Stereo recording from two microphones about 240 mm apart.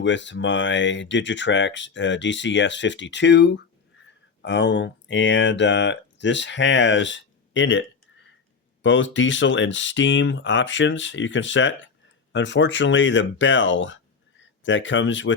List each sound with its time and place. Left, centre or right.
0.0 s speech: left